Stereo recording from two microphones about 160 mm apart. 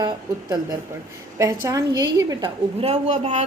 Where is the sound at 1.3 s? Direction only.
20° right (ahead or behind).